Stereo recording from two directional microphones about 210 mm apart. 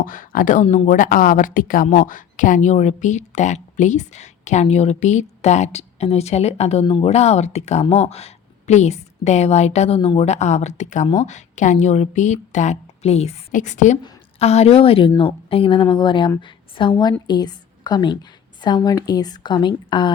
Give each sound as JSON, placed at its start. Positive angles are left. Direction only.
{"t": 0.0, "sound": "a woman's voice", "side_deg": 40}